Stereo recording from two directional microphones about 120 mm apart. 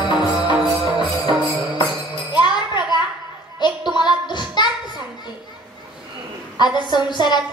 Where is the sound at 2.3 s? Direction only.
40° left (ahead or behind).